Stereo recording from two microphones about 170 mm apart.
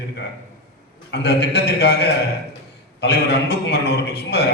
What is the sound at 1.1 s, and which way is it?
A man's voice, 75° left (ahead or behind).